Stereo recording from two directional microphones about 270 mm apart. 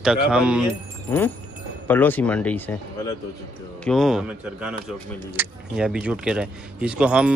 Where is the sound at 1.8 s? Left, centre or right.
Centre.